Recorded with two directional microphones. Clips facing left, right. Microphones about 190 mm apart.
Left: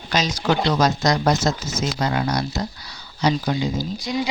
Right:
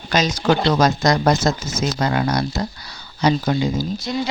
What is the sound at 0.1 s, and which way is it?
Speech, 50° right (ahead or behind).